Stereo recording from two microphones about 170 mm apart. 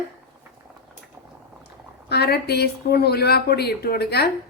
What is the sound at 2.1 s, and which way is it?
Speech, 70° left (ahead or behind).